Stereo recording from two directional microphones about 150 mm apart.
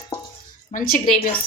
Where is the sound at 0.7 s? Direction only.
65° left (ahead or behind).